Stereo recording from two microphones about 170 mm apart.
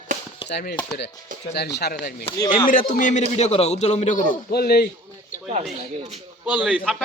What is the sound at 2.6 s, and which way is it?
A man's voice, 50° left (ahead or behind).